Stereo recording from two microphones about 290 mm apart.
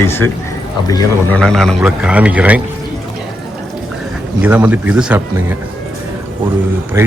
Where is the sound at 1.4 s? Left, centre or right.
Centre.